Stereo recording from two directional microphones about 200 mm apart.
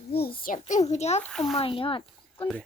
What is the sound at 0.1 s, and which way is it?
Speech, 50° left (ahead or behind).